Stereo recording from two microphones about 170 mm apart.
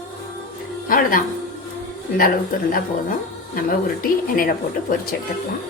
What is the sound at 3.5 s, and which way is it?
Speech, 55° left (ahead or behind).